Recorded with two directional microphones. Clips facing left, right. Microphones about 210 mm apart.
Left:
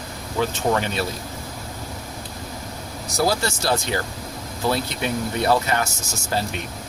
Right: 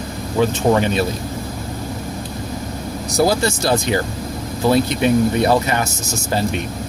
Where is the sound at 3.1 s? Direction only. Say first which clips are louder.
Right 5 dB; 15° right (ahead or behind).